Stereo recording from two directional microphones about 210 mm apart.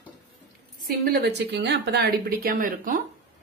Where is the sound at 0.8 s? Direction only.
50° right (ahead or behind).